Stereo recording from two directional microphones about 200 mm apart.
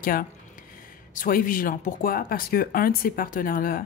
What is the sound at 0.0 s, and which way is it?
Speech, 45° left (ahead or behind).